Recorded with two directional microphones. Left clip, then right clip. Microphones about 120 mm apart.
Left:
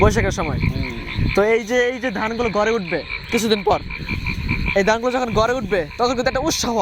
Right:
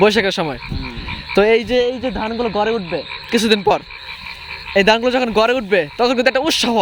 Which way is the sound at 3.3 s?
55° right (ahead or behind).